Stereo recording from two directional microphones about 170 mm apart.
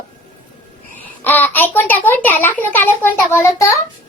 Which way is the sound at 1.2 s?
10° left (ahead or behind).